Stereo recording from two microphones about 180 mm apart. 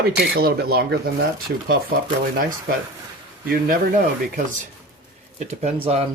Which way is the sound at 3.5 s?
50° right (ahead or behind).